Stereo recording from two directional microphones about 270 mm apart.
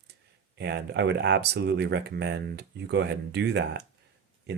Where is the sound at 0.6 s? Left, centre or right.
Right.